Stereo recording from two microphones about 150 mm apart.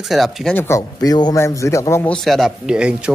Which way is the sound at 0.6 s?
20° left (ahead or behind).